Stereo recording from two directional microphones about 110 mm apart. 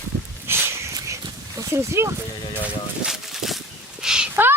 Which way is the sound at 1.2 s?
35° right (ahead or behind).